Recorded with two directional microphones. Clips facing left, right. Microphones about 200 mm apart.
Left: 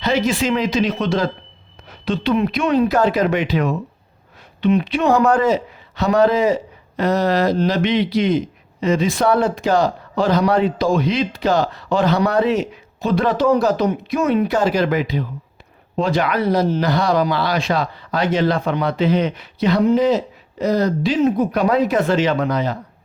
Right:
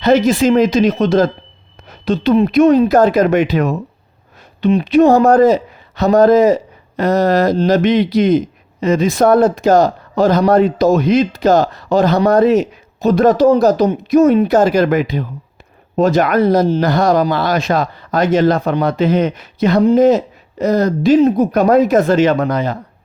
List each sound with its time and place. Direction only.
0.0 s speech: 45° right (ahead or behind)